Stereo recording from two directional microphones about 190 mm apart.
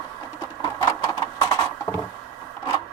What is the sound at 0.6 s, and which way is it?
Printer, 20° left (ahead or behind).